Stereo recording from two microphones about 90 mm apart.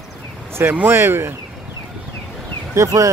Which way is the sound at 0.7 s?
25° right (ahead or behind).